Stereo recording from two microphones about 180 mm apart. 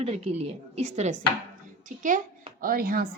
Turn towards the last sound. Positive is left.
turn(degrees=-55)  # may be behind; listen again after turning